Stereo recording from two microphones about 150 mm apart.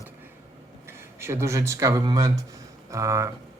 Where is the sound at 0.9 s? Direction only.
15° right (ahead or behind).